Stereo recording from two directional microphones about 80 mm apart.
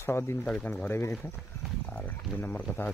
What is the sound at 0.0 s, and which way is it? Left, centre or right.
Speech, left.